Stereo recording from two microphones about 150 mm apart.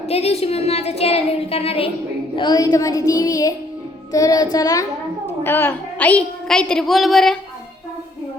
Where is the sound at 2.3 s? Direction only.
30° left (ahead or behind).